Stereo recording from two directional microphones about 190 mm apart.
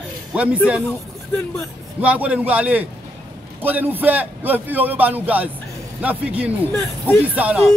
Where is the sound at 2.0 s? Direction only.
5° right (ahead or behind).